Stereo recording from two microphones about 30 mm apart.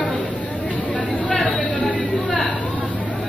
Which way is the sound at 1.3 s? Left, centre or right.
Centre.